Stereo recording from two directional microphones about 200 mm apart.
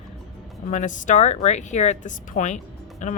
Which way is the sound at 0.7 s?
40° left (ahead or behind).